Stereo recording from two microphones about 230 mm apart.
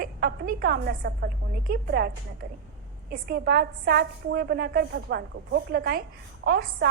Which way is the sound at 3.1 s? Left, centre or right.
Right.